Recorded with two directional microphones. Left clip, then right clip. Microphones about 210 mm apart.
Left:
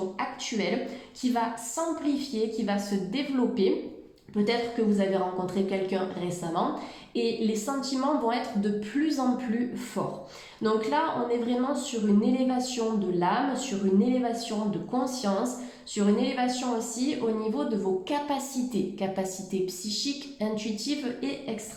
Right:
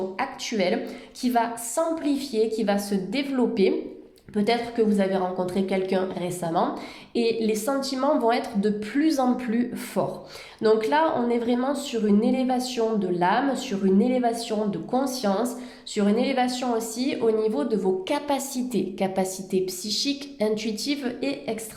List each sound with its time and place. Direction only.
0.2 s a sound: 50° right (ahead or behind)
1.2 s a woman's voice: 50° right (ahead or behind)
4.9 s a woman's voice: 50° right (ahead or behind)